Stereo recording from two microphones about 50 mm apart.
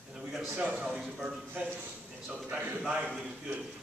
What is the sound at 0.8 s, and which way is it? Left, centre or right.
Speech, centre.